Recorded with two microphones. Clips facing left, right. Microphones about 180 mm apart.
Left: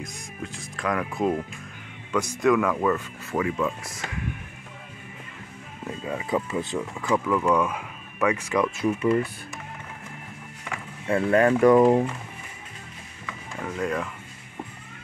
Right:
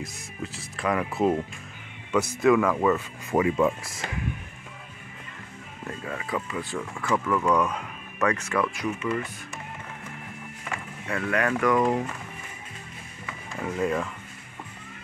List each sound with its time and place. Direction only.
0.0 s speech: 5° right (ahead or behind)
2.4 s speech: 5° right (ahead or behind)
3.3 s speech: 20° right (ahead or behind)
5.9 s speech: 15° left (ahead or behind)
8.7 s speech: 30° left (ahead or behind)
11.1 s speech: 30° left (ahead or behind)
13.6 s speech: 5° right (ahead or behind)